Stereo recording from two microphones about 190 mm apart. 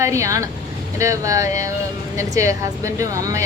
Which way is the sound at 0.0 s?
15° right (ahead or behind).